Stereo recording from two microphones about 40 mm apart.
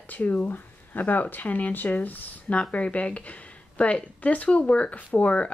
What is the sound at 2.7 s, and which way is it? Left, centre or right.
Speech, left.